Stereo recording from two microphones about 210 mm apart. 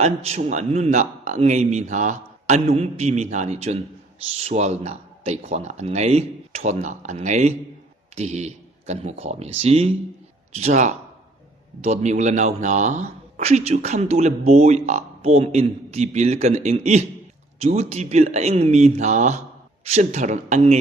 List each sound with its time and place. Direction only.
0.0 s a man's voice: 35° right (ahead or behind)